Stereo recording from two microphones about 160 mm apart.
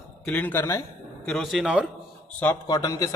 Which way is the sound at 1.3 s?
Centre (ahead or behind).